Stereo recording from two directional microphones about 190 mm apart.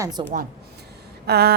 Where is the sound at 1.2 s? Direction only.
55° right (ahead or behind).